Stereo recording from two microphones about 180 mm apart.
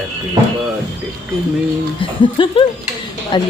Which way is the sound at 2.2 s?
30° left (ahead or behind).